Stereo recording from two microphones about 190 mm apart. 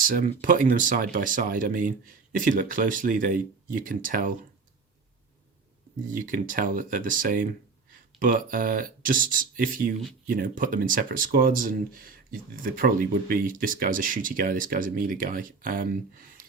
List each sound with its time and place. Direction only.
0.0 s speech: 45° right (ahead or behind)
6.1 s speech: 45° right (ahead or behind)